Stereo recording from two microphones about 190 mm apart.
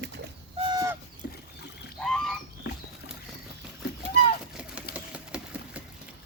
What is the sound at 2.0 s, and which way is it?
Rowboat, 5° left (ahead or behind).